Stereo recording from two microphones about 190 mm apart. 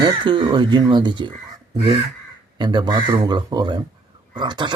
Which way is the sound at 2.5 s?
25° right (ahead or behind).